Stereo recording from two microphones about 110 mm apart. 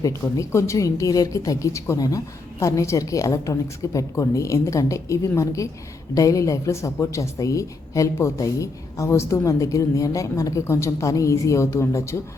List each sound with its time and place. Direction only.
0.0 s speech: 30° left (ahead or behind)